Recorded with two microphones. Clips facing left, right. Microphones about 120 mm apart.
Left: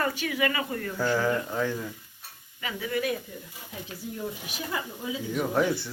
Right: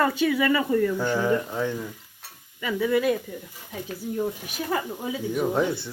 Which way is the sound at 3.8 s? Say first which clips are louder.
Right 8 dB; 45° right (ahead or behind).